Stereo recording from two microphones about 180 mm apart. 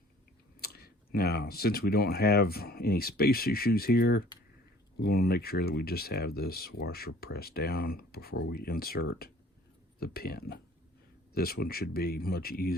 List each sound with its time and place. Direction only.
0.6 s speech: 60° left (ahead or behind)